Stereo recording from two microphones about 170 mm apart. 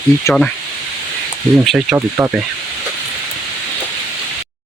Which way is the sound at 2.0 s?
15° right (ahead or behind).